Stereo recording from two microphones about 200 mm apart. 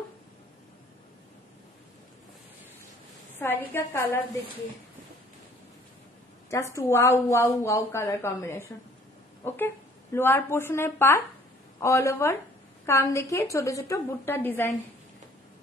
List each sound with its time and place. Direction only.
3.3 s a woman's voice: 10° left (ahead or behind)
6.5 s a woman's voice: 15° left (ahead or behind)